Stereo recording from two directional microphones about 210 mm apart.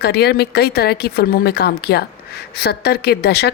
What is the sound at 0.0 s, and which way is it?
Speech, 50° left (ahead or behind).